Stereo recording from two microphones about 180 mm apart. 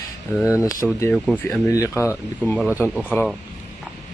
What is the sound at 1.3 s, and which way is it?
Speech, 5° left (ahead or behind).